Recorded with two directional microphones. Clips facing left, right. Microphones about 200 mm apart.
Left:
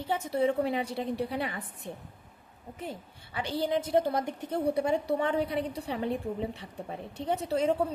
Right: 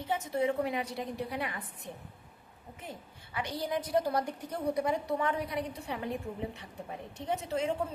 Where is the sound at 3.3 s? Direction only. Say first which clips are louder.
Left 4 dB; 30° left (ahead or behind).